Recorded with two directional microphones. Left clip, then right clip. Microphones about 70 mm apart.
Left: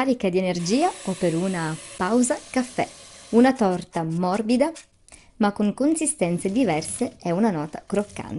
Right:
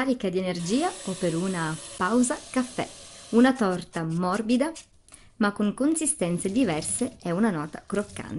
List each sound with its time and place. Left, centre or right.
0.0 s speech: left
5.8 s a woman's voice: left